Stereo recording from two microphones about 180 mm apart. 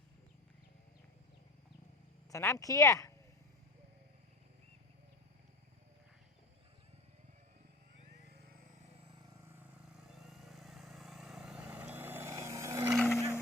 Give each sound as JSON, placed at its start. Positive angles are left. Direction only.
{"t": 2.3, "sound": "speech", "side_deg": 15}
{"t": 9.9, "sound": "vehicle", "side_deg": 0}
{"t": 12.9, "sound": "vehicle", "side_deg": 0}